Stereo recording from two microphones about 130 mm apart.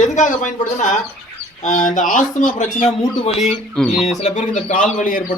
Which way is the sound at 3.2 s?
60° left (ahead or behind).